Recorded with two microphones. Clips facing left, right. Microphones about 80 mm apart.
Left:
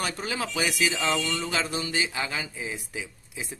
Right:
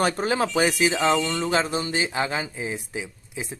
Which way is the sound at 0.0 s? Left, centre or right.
Right.